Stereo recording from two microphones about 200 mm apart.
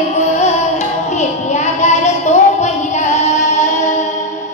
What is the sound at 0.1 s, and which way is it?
Music, 35° left (ahead or behind).